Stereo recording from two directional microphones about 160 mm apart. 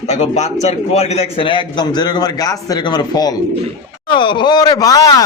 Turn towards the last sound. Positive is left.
turn(degrees=25)  # may be behind; listen again after turning